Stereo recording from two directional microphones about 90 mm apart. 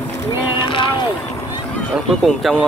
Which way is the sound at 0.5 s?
70° left (ahead or behind).